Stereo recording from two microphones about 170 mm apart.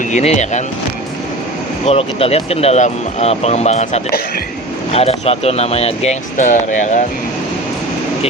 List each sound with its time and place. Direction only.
0.1 s speech: 40° left (ahead or behind)
1.8 s speech: 35° left (ahead or behind)